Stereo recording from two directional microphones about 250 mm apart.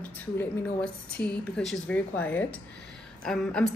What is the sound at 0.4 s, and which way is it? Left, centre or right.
A woman's voice, centre.